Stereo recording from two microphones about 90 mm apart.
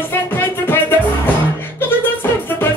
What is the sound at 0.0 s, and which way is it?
Music, 25° left (ahead or behind).